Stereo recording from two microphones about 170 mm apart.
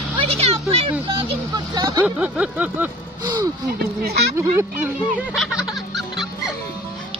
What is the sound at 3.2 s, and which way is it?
Speech, 25° right (ahead or behind).